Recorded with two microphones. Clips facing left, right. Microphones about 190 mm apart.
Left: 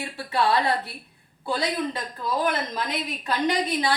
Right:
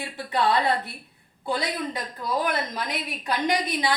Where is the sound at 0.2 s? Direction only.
20° right (ahead or behind).